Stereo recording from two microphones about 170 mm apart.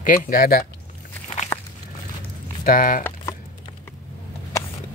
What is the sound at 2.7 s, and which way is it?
Speech, 55° left (ahead or behind).